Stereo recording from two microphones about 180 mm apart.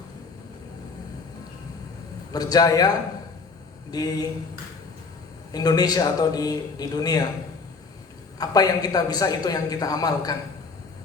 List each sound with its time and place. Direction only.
2.3 s a woman's voice: 20° left (ahead or behind)
3.9 s a woman's voice: 20° left (ahead or behind)
5.5 s a woman's voice: 20° left (ahead or behind)
8.4 s a woman's voice: 20° left (ahead or behind)